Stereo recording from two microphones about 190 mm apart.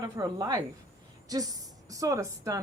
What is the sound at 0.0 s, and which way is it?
A woman's voice, 20° right (ahead or behind).